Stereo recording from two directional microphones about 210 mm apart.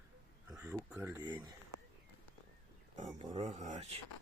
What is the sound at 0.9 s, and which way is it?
Speech, 10° right (ahead or behind).